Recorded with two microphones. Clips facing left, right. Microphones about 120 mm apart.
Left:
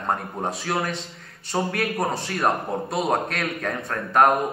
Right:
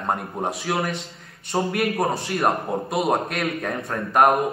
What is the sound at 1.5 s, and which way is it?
A man's voice, 5° right (ahead or behind).